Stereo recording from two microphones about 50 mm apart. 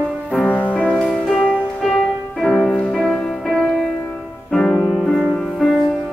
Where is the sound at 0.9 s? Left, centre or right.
Centre.